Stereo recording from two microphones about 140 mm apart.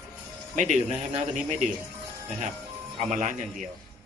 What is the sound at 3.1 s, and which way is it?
Speech, 65° right (ahead or behind).